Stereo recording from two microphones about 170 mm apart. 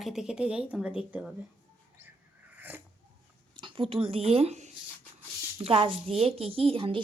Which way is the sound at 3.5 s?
30° right (ahead or behind).